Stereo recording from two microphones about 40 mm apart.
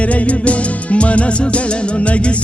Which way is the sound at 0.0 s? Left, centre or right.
Left.